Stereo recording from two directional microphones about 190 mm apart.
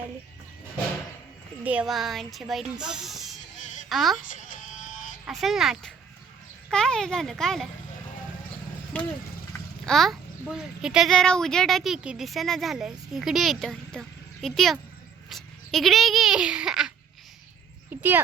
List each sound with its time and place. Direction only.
1.6 s a child's voice: 5° right (ahead or behind)
4.4 s sheep: 40° left (ahead or behind)
5.2 s a child's voice: centre (ahead or behind)
9.8 s a child's voice: centre (ahead or behind)